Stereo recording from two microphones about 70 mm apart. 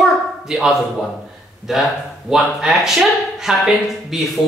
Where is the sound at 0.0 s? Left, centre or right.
Centre.